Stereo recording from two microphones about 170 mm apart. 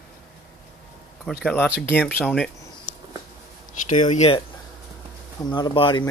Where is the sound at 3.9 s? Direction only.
45° left (ahead or behind).